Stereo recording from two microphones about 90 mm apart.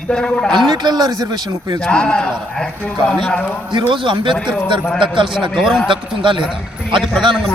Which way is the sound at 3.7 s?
60° right (ahead or behind).